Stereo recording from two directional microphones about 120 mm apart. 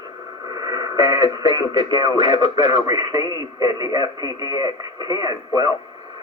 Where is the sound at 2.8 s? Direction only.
30° right (ahead or behind).